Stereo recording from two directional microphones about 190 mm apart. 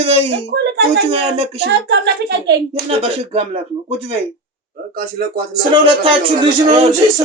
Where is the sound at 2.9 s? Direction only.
30° right (ahead or behind).